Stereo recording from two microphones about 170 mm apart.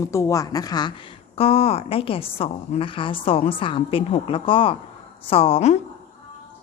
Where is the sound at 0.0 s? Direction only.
15° left (ahead or behind).